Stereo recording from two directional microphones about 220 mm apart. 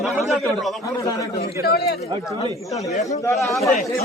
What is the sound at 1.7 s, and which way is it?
Speech, 45° left (ahead or behind).